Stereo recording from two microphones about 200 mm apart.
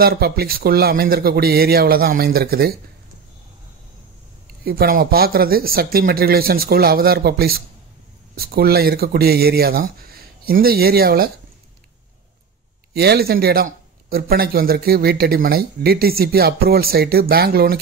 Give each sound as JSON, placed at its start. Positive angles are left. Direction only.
{"t": 0.0, "sound": "speech", "side_deg": -50}
{"t": 4.6, "sound": "speech", "side_deg": -50}
{"t": 12.9, "sound": "speech", "side_deg": -55}